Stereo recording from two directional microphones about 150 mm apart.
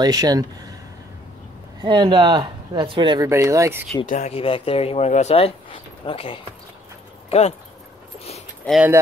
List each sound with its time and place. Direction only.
0.0 s speech: 25° right (ahead or behind)
1.8 s speech: 30° right (ahead or behind)
3.3 s speech: 20° right (ahead or behind)
4.0 s speech: 60° left (ahead or behind)
4.3 s speech: 40° left (ahead or behind)
8.6 s speech: 10° left (ahead or behind)